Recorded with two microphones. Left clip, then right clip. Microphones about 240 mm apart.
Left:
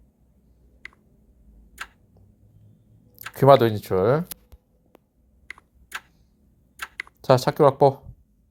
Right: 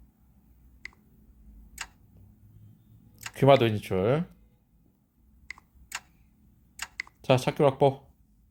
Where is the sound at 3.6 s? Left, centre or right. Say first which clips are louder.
Left 6 dB; centre.